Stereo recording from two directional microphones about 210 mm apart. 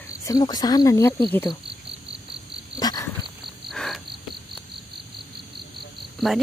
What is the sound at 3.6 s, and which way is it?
Cricket, centre (ahead or behind).